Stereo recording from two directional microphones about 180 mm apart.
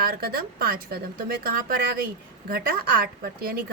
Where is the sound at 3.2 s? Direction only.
55° right (ahead or behind).